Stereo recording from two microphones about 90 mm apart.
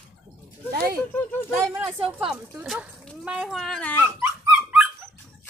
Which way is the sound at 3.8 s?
20° left (ahead or behind).